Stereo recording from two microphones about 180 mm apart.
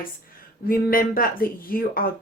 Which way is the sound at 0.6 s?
55° left (ahead or behind).